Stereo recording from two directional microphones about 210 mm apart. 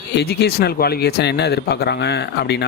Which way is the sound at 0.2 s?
50° left (ahead or behind).